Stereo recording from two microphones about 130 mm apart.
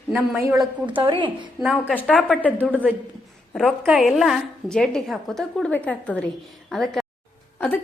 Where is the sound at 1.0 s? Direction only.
40° right (ahead or behind).